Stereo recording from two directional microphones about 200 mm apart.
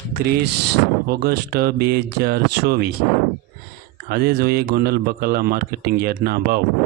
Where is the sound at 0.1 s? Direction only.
55° right (ahead or behind).